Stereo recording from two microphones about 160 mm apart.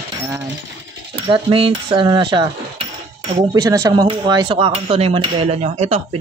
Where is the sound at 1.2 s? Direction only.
35° right (ahead or behind).